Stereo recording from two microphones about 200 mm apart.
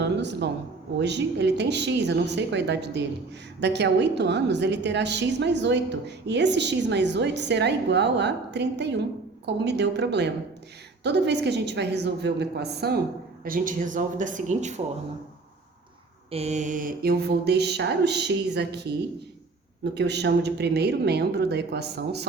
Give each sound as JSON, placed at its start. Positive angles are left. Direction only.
{"t": 0.0, "sound": "a sound", "side_deg": -60}
{"t": 0.9, "sound": "a woman's voice", "side_deg": -60}
{"t": 13.4, "sound": "speech", "side_deg": -45}
{"t": 16.3, "sound": "a woman's voice", "side_deg": -35}